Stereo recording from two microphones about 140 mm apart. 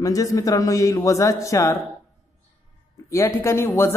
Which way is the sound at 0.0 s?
25° left (ahead or behind).